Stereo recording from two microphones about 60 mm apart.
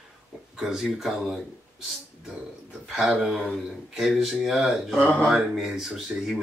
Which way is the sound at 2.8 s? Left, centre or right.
Centre.